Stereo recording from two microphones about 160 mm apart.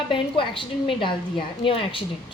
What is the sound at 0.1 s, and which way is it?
A woman's voice, 30° left (ahead or behind).